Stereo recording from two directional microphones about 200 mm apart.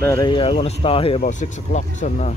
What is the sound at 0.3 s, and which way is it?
Speech, 25° left (ahead or behind).